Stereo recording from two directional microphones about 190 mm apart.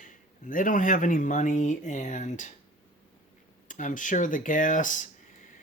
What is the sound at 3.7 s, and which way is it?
Speech, 45° left (ahead or behind).